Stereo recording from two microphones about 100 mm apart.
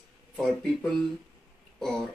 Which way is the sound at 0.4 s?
5° left (ahead or behind).